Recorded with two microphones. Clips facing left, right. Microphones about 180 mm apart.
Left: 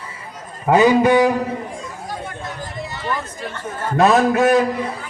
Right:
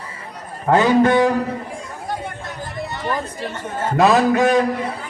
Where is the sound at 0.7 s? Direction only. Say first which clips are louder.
Left 1 dB; 10° left (ahead or behind).